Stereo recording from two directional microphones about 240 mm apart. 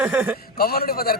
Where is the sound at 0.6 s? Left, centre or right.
Left.